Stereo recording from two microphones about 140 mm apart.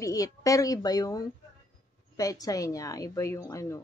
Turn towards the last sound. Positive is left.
turn(degrees=20)  # may be behind; listen again after turning